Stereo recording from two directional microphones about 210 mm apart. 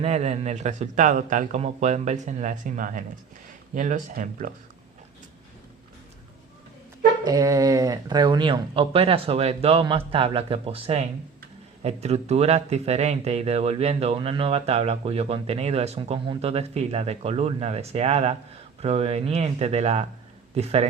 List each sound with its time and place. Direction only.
0.0 s a man's voice: 30° right (ahead or behind)
7.3 s speech: 15° right (ahead or behind)